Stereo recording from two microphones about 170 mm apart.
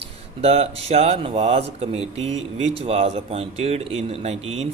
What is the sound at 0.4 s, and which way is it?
Speech, 35° right (ahead or behind).